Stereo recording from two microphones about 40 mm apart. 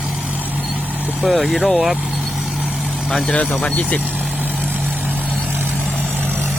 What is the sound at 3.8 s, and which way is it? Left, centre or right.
Speech, left.